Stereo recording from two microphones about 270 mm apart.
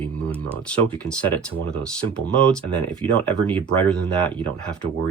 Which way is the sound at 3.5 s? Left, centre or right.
Centre.